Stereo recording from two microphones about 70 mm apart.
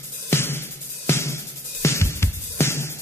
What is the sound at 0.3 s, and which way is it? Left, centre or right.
Music, left.